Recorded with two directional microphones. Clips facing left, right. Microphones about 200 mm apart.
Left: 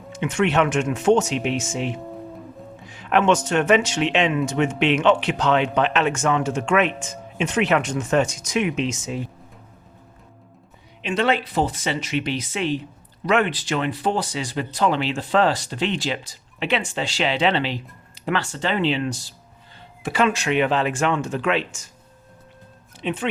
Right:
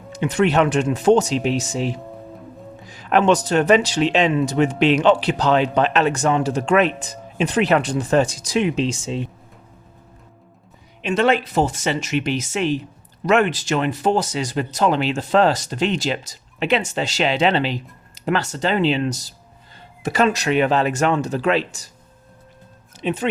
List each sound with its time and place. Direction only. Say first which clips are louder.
0.1 s speech: right 3 dB; 35° right (ahead or behind)
11.0 s speech: right 3 dB; 45° right (ahead or behind)
23.0 s speech: right 3 dB; 40° right (ahead or behind)